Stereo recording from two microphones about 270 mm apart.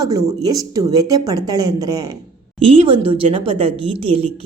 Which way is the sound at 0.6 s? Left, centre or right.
Centre.